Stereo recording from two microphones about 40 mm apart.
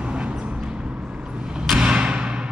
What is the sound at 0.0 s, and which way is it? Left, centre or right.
Vehicle, right.